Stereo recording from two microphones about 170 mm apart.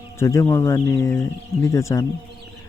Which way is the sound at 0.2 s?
15° left (ahead or behind).